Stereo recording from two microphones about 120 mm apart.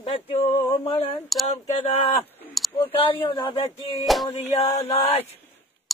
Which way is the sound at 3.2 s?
45° left (ahead or behind).